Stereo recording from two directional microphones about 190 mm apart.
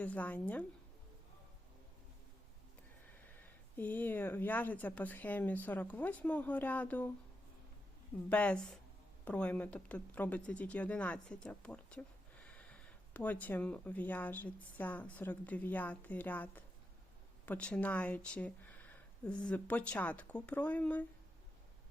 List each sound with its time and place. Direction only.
0.0 s speech: 10° left (ahead or behind)
3.8 s speech: 10° left (ahead or behind)
8.3 s a woman's voice: 5° left (ahead or behind)